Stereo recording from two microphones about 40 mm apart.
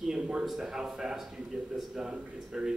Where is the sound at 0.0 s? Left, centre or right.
Centre.